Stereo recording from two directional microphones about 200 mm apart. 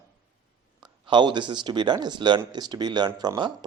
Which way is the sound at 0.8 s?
20° right (ahead or behind).